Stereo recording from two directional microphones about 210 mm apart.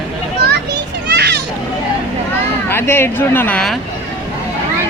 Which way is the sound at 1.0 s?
50° right (ahead or behind).